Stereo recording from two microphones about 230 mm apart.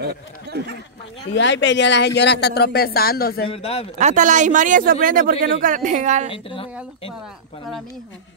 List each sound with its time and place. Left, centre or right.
0.0 s speech: right
1.3 s speech: left
3.4 s speech: left
4.0 s a man's voice: right
6.3 s speech: left